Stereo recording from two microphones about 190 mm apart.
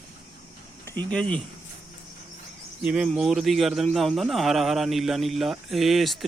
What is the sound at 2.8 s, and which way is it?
A man's voice, 5° right (ahead or behind).